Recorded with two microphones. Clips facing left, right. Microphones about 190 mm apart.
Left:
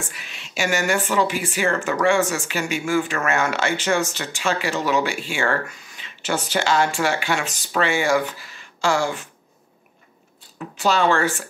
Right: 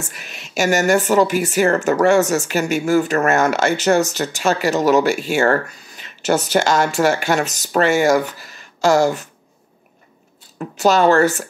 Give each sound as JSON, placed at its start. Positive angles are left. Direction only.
{"t": 0.1, "sound": "speech", "side_deg": -45}
{"t": 10.8, "sound": "speech", "side_deg": -40}